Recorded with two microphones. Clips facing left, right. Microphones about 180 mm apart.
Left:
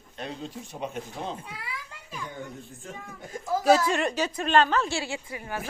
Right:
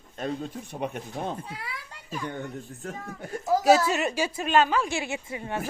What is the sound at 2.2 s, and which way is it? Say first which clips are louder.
Speech: right 4 dB; 65° right (ahead or behind).